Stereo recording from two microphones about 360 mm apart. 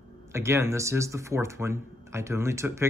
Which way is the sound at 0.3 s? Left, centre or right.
Centre.